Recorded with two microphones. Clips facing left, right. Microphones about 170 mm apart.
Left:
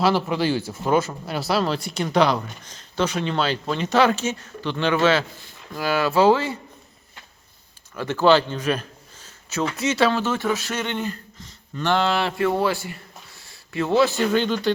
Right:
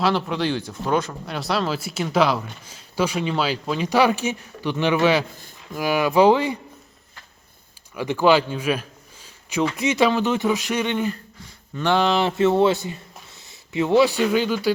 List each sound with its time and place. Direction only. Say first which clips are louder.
0.0 s speech: left 1 dB; 5° left (ahead or behind); by 6.6 s 15° right (ahead or behind)
7.9 s a man's voice: even; 15° right (ahead or behind)